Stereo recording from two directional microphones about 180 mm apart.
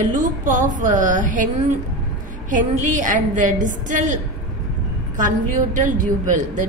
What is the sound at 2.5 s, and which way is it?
A man's voice, 45° right (ahead or behind).